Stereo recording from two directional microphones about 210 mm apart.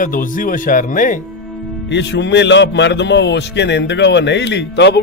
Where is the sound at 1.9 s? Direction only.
55° left (ahead or behind).